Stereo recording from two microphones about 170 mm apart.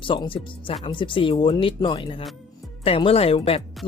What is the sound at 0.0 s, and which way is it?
Speech, 30° left (ahead or behind).